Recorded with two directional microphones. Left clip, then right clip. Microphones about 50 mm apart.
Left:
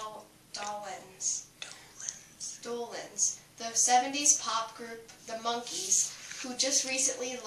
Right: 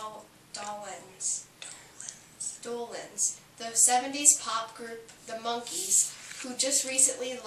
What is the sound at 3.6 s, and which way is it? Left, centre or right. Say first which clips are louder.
A woman's voice: left 1 dB; centre.